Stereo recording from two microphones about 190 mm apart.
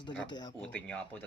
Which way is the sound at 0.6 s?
5° left (ahead or behind).